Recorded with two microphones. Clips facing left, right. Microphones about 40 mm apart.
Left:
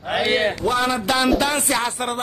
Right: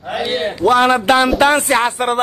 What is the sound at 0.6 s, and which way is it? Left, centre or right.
A man's voice, right.